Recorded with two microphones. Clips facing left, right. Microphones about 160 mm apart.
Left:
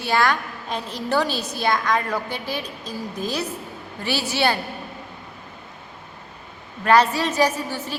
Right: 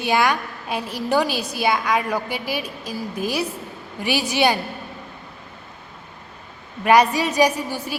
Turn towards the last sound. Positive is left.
turn(degrees=-10)  # may be behind; listen again after turning